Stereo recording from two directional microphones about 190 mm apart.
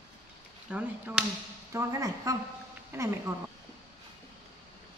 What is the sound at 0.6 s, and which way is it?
Speech, 5° right (ahead or behind).